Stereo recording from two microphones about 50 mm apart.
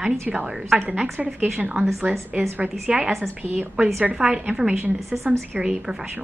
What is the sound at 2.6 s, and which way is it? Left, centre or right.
Speech, right.